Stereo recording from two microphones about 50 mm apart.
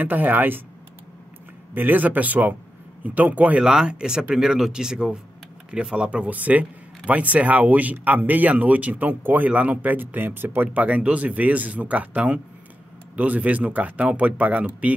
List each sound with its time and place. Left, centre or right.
0.0 s speech: right
1.7 s speech: right
3.6 s speech: centre; by 10.7 s right
10.7 s speech: right